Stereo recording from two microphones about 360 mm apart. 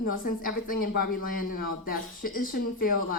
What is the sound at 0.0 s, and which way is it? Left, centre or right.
A woman's voice, left.